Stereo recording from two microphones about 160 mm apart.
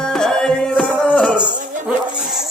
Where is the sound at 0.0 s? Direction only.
5° left (ahead or behind).